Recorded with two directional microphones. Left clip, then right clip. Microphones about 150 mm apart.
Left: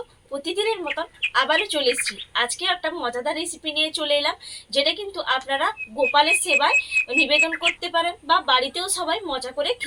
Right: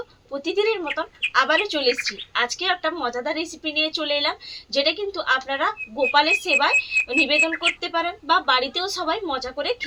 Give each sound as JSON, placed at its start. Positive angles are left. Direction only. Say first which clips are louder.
{"t": 0.3, "sound": "speech", "louder": "right 2 dB", "side_deg": -5}